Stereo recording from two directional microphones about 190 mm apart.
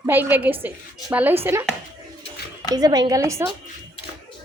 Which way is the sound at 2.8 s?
20° right (ahead or behind).